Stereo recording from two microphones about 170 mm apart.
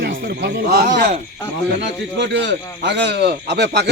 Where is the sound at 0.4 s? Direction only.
70° right (ahead or behind).